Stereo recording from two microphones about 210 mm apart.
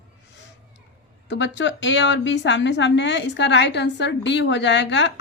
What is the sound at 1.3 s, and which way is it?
A woman's voice, 60° left (ahead or behind).